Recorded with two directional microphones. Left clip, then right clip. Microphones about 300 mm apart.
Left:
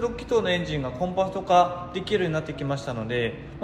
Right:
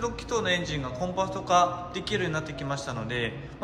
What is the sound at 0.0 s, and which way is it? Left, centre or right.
A man's voice, centre.